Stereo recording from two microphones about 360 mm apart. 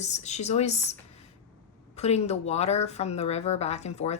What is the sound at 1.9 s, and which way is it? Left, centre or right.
Speech, centre.